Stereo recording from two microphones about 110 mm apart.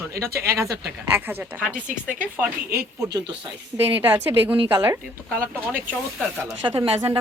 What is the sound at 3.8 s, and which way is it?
A woman's voice, 20° right (ahead or behind).